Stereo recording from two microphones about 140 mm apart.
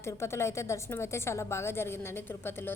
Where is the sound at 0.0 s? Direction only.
20° left (ahead or behind).